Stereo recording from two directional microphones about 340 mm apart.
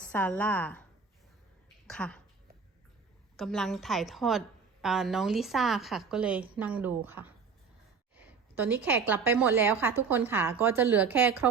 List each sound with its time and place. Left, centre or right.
0.0 s a woman's voice: centre
1.9 s a woman's voice: centre
3.3 s a woman's voice: centre